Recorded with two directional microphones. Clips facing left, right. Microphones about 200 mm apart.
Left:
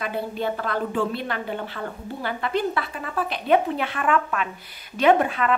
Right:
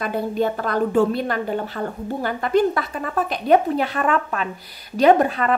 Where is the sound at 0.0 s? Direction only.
45° right (ahead or behind).